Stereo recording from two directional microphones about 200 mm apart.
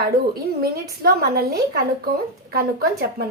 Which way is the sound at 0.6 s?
50° right (ahead or behind).